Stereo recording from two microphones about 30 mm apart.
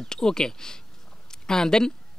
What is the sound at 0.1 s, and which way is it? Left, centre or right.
Speech, left.